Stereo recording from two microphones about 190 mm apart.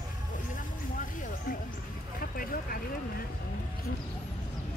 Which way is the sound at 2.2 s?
50° left (ahead or behind).